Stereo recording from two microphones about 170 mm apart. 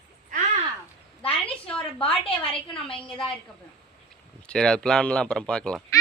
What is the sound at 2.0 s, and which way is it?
A woman's voice, 30° left (ahead or behind).